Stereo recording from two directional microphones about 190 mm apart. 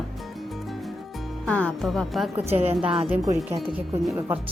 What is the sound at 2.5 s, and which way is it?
Speech, 30° right (ahead or behind).